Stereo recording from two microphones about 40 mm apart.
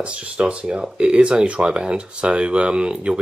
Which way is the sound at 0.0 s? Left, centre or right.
Right.